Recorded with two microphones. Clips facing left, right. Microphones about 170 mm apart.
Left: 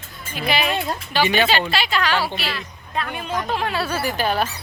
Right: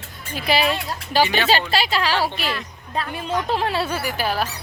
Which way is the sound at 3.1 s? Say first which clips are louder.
Right 3 dB; 30° right (ahead or behind).